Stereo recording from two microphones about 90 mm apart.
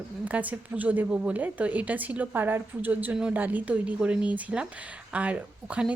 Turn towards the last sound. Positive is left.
turn(degrees=-15)  # may be behind; listen again after turning